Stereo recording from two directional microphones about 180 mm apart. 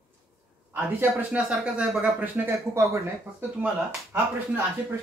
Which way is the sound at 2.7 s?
15° right (ahead or behind).